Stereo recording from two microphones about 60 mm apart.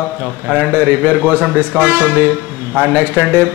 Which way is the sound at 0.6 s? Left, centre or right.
Right.